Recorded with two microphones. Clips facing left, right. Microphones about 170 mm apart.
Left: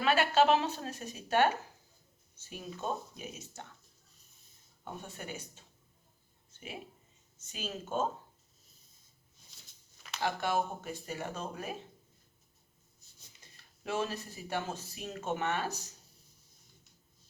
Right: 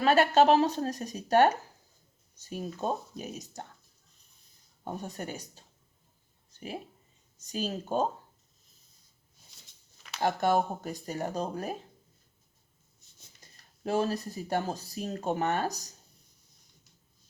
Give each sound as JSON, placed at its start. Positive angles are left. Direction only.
{"t": 0.0, "sound": "speech", "side_deg": -40}
{"t": 4.9, "sound": "speech", "side_deg": -40}
{"t": 6.5, "sound": "a sound", "side_deg": -35}
{"t": 7.4, "sound": "speech", "side_deg": -35}
{"t": 10.2, "sound": "speech", "side_deg": -40}
{"t": 13.6, "sound": "speech", "side_deg": -35}